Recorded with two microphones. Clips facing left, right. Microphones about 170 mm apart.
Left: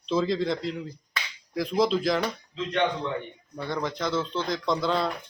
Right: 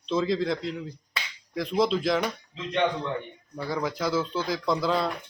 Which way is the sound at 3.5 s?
5° right (ahead or behind).